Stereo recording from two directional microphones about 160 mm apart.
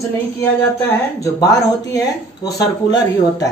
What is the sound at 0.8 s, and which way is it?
Speech, 15° left (ahead or behind).